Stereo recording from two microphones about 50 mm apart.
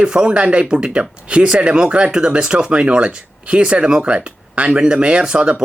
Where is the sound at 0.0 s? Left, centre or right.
Centre.